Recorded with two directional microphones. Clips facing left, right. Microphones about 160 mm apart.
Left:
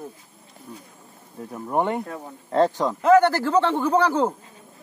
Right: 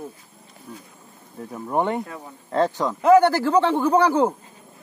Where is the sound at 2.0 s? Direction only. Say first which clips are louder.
Left 2 dB; 45° left (ahead or behind).